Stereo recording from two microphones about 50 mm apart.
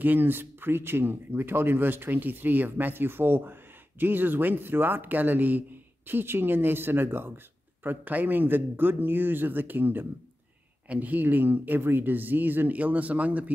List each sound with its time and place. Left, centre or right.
0.0 s speech: right